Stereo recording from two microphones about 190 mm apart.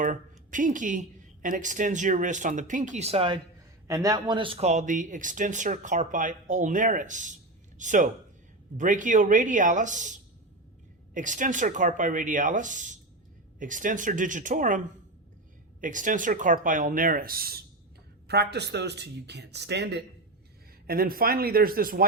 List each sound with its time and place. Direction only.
0.0 s speech: 45° right (ahead or behind); by 3.4 s 30° right (ahead or behind)
3.8 s speech: 20° right (ahead or behind); by 14.8 s 45° right (ahead or behind)
15.8 s speech: 45° right (ahead or behind); by 20.0 s 60° right (ahead or behind)
20.8 s speech: 50° right (ahead or behind)